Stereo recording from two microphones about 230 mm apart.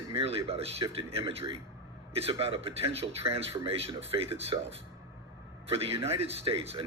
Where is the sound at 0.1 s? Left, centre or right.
Right.